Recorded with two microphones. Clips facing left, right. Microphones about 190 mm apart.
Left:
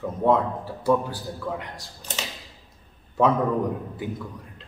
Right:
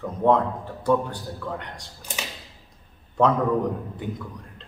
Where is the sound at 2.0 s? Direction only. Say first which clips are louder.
Left 1 dB; 10° right (ahead or behind).